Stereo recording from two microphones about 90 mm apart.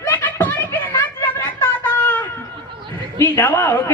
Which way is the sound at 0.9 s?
35° left (ahead or behind).